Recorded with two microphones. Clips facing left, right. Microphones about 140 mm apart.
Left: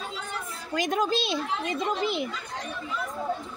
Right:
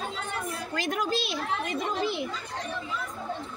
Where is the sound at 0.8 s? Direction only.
20° left (ahead or behind).